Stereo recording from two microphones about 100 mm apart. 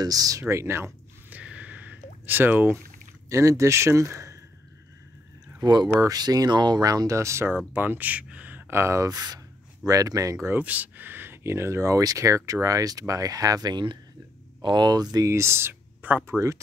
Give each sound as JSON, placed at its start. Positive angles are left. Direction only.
{"t": 0.0, "sound": "speech", "side_deg": -35}
{"t": 0.4, "sound": "speech", "side_deg": -25}
{"t": 1.3, "sound": "a sound", "side_deg": -10}
{"t": 3.3, "sound": "speech", "side_deg": -30}
{"t": 5.6, "sound": "speech", "side_deg": -40}
{"t": 10.6, "sound": "speech", "side_deg": -15}
{"t": 15.1, "sound": "speech", "side_deg": -30}
{"t": 16.3, "sound": "speech", "side_deg": -30}